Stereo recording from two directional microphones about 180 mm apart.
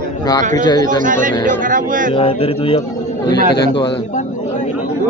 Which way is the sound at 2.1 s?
30° left (ahead or behind).